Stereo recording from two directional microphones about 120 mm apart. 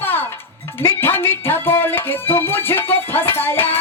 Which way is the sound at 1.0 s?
20° left (ahead or behind).